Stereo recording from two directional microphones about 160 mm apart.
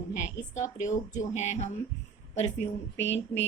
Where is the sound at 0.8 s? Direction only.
50° left (ahead or behind).